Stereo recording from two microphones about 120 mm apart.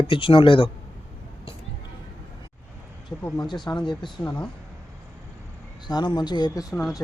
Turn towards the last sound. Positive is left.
turn(degrees=35)  # may be behind; listen again after turning